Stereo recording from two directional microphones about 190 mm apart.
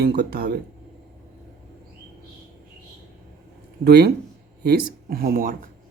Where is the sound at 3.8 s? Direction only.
60° right (ahead or behind).